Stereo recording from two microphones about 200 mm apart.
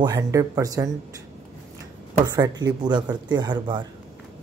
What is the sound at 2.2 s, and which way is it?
Speech, 20° right (ahead or behind).